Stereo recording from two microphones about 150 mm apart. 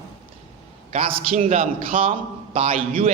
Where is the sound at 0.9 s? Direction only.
45° right (ahead or behind).